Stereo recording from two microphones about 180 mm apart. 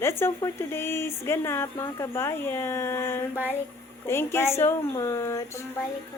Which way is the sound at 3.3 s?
10° right (ahead or behind).